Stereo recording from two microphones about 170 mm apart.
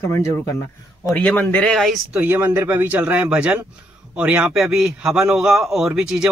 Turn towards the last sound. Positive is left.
turn(degrees=-5)  # may be behind; listen again after turning